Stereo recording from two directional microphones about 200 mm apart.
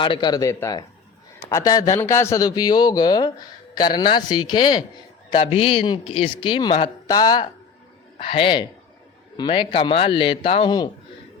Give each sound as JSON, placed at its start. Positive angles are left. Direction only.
{"t": 0.0, "sound": "speech", "side_deg": 25}